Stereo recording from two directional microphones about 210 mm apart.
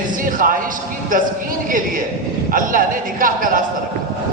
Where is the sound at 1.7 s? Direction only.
40° right (ahead or behind).